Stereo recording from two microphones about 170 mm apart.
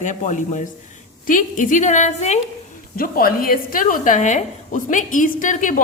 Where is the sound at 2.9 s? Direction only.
60° left (ahead or behind).